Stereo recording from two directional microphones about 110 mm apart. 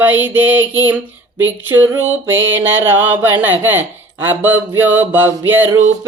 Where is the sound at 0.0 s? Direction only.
15° right (ahead or behind).